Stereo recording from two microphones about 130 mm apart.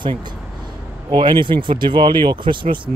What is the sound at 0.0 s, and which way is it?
Speech, 35° right (ahead or behind).